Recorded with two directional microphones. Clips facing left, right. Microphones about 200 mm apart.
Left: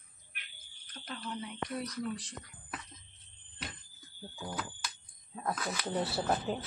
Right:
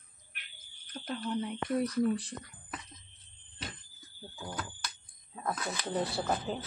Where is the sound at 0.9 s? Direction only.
45° right (ahead or behind).